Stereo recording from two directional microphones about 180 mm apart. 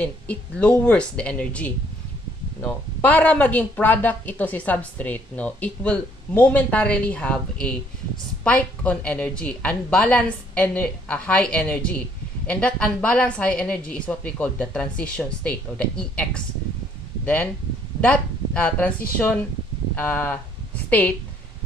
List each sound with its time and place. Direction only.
0.0 s speech: 5° left (ahead or behind)